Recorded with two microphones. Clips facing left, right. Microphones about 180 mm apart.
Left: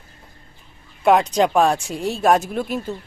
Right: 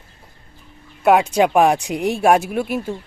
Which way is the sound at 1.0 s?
5° right (ahead or behind).